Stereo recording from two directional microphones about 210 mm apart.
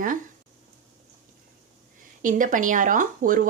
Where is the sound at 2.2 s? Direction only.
40° right (ahead or behind).